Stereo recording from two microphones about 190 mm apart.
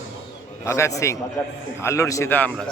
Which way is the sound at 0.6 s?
15° left (ahead or behind).